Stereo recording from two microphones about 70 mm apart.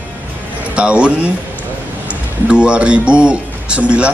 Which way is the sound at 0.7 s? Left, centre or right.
Centre.